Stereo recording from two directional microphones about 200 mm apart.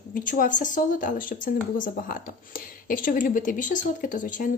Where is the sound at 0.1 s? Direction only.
40° left (ahead or behind).